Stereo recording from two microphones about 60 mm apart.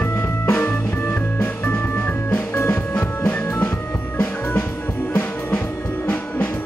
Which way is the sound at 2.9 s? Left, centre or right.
Left.